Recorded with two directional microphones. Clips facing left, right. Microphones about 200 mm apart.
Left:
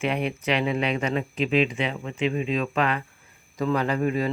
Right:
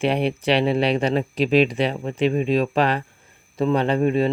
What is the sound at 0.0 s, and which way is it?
Speech, 30° right (ahead or behind).